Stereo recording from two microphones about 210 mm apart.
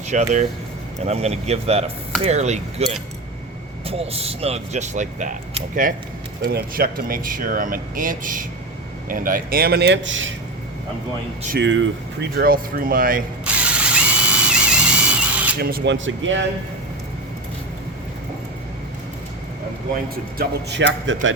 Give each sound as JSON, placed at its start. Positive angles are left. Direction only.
{"t": 0.1, "sound": "speech", "side_deg": -35}
{"t": 11.5, "sound": "speech", "side_deg": -60}
{"t": 12.4, "sound": "speech", "side_deg": -45}
{"t": 13.4, "sound": "drill", "side_deg": -5}
{"t": 15.5, "sound": "speech", "side_deg": -45}
{"t": 20.7, "sound": "speech", "side_deg": -55}